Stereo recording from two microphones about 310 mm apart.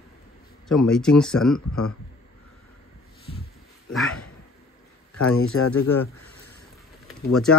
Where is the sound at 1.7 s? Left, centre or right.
Left.